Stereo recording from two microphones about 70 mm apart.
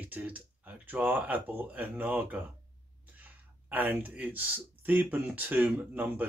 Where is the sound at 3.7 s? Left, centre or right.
Right.